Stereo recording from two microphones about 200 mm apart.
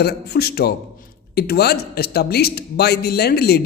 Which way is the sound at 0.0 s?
55° left (ahead or behind).